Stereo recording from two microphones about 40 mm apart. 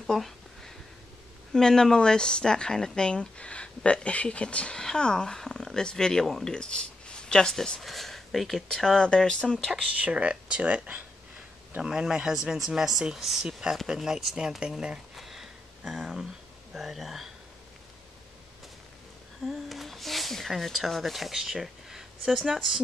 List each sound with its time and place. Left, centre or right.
0.0 s a sound: centre
1.5 s speech: centre
4.7 s speech: centre
6.5 s speech: left
7.8 s speech: centre
9.0 s speech: left
9.8 s speech: right
11.8 s speech: centre
14.6 s speech: right
15.1 s a sound: centre
16.7 s speech: centre
19.4 s speech: centre
21.3 s speech: centre